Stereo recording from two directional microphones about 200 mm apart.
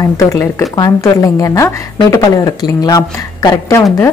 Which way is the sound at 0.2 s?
15° left (ahead or behind).